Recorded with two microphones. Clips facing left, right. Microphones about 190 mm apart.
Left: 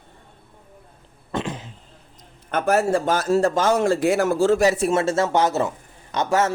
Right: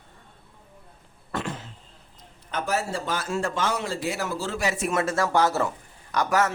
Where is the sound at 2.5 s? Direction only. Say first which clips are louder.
Left 8 dB; 55° left (ahead or behind); by 6.5 s 25° left (ahead or behind).